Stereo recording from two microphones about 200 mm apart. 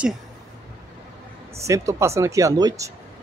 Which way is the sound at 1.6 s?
15° right (ahead or behind).